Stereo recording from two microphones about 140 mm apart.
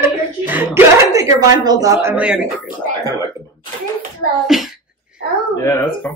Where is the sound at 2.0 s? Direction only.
10° right (ahead or behind).